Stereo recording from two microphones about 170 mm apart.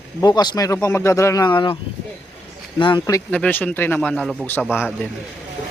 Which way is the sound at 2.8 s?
25° left (ahead or behind).